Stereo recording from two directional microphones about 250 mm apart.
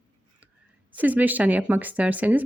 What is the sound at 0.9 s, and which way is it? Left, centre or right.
Speech, centre.